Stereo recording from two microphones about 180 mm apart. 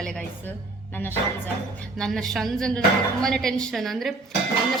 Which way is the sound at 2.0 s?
Centre (ahead or behind).